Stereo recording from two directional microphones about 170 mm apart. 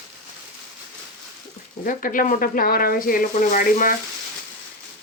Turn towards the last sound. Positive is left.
turn(degrees=50)  # may be behind; listen again after turning